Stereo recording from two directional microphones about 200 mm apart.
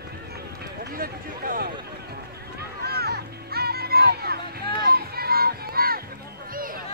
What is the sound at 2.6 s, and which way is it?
Music, 50° right (ahead or behind).